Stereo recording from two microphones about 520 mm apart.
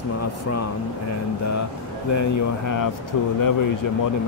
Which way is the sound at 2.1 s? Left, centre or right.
Left.